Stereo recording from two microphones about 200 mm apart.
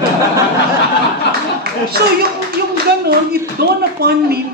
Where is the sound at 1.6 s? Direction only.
50° right (ahead or behind).